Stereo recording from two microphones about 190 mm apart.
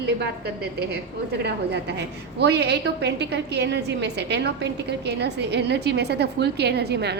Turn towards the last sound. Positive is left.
turn(degrees=-60)  # may be behind; listen again after turning